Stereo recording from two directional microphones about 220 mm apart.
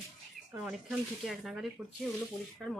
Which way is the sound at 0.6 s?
Centre (ahead or behind).